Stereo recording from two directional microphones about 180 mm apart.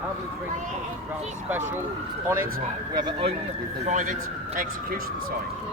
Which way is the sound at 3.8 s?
45° right (ahead or behind).